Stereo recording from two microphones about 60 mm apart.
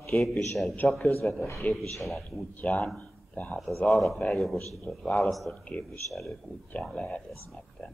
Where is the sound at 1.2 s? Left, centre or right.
Centre.